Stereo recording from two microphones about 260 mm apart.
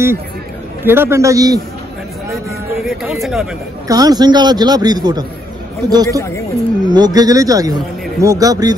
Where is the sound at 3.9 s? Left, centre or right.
Centre.